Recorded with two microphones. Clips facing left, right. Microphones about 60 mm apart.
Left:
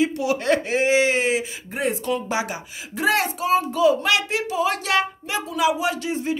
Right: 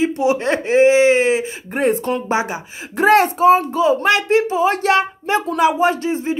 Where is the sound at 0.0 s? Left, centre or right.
Right.